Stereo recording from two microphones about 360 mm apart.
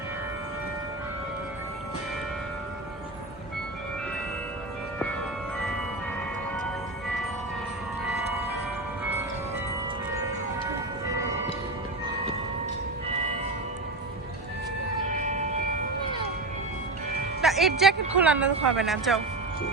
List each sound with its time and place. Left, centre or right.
15.1 s vehicle: centre
17.4 s speech: centre